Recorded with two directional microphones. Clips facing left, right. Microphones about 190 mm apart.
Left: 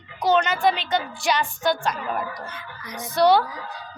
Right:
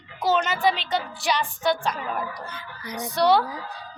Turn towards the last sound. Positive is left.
turn(degrees=0)  # may be behind; listen again after turning